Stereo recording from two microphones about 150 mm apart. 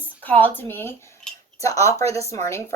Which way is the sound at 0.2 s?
10° left (ahead or behind).